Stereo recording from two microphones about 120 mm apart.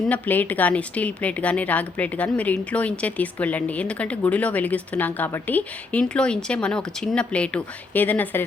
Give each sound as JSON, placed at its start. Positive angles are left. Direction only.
{"t": 0.1, "sound": "a woman's voice", "side_deg": 15}